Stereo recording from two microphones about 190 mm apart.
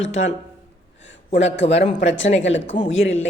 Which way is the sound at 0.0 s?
85° left.